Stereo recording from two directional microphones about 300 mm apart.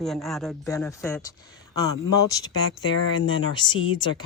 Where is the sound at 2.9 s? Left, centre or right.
Centre.